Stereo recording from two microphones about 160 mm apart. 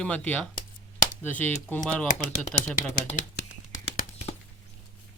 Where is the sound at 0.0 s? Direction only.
10° left (ahead or behind).